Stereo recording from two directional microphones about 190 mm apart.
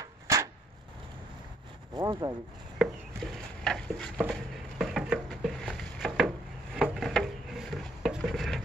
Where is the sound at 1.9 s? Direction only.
20° right (ahead or behind).